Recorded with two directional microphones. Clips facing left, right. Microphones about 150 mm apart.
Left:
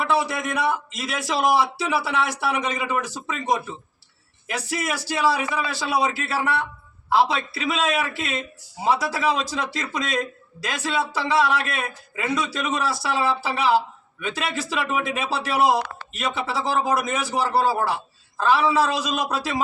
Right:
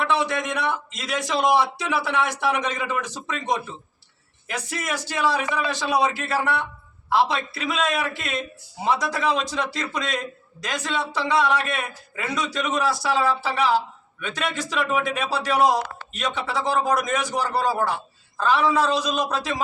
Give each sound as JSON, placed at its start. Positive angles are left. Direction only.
{"t": 0.0, "sound": "a man's voice", "side_deg": 5}